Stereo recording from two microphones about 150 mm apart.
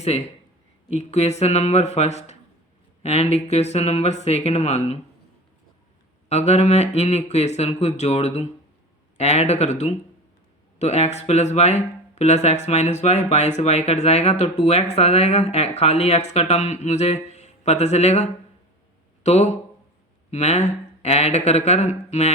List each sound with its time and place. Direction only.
0.9 s speech: 45° left (ahead or behind)
6.2 s speech: 45° left (ahead or behind)